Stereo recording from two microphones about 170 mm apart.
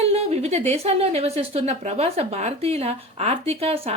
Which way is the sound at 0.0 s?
35° right (ahead or behind).